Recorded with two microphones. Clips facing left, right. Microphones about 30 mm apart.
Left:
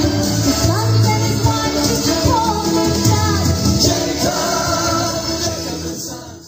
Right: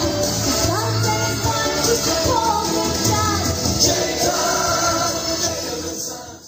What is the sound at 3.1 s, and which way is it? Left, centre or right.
Music, left.